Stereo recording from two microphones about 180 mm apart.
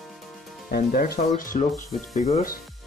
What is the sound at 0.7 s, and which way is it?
Speech, 60° left (ahead or behind).